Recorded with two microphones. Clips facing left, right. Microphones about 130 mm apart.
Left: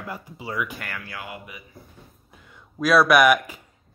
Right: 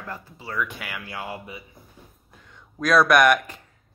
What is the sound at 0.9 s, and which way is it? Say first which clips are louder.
Speech: right 2 dB; 25° right (ahead or behind).